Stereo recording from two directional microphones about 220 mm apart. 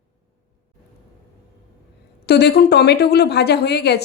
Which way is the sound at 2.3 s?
45° left (ahead or behind).